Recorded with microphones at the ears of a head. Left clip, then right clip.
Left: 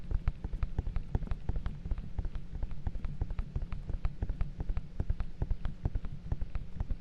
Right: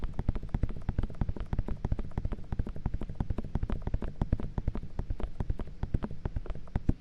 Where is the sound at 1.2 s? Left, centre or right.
Right.